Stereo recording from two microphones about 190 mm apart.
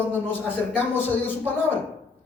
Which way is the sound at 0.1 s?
10° left (ahead or behind).